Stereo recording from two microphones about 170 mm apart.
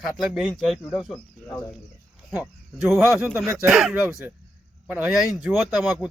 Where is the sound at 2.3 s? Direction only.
10° right (ahead or behind).